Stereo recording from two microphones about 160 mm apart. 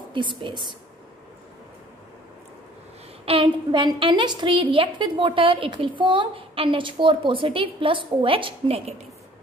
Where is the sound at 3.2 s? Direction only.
30° right (ahead or behind).